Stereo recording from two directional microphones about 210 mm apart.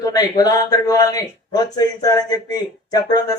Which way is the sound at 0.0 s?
15° left (ahead or behind).